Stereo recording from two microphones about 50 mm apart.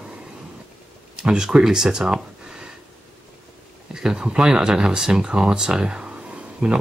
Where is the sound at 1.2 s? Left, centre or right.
Centre.